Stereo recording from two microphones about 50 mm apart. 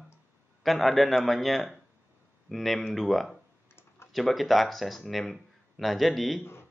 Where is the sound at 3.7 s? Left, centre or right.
Left.